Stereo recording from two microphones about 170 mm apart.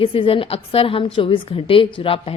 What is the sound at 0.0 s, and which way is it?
A woman's voice, 30° left (ahead or behind).